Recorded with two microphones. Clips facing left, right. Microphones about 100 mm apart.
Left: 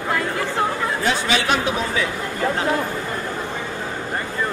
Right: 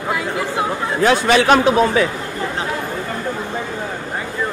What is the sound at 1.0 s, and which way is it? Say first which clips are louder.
A man's voice: right 10 dB; 60° right (ahead or behind).